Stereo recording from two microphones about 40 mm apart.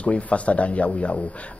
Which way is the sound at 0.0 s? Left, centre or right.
Left.